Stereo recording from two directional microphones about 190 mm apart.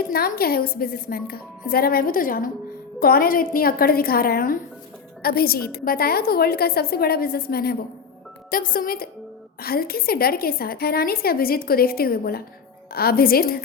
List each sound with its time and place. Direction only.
0.1 s a woman's voice: 50° left (ahead or behind)